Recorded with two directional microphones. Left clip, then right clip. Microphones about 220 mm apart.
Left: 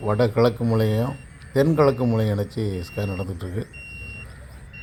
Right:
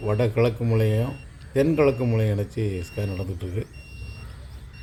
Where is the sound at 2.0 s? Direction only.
5° left (ahead or behind).